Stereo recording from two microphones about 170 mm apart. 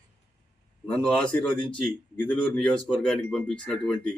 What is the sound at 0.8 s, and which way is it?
Speech, 5° left (ahead or behind).